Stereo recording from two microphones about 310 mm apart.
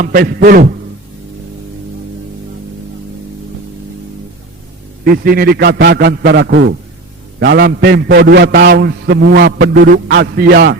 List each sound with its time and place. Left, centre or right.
0.0 s a man's voice: right
5.0 s a man's voice: right